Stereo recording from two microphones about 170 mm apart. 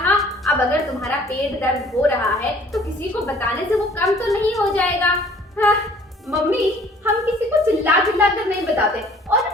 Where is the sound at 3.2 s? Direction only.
20° left (ahead or behind).